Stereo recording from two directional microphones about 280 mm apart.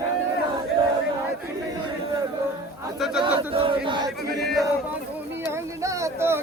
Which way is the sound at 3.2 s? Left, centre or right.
Centre.